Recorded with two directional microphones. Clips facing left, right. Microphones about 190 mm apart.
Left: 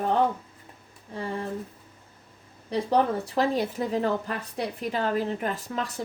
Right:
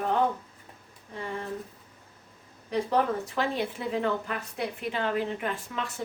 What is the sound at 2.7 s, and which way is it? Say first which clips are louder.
A woman's voice: left 2 dB; 35° left (ahead or behind).